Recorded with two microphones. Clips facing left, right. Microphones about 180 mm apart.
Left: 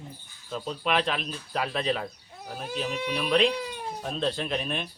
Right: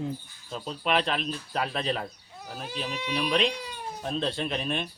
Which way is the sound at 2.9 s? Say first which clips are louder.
Left 2 dB; 45° left (ahead or behind).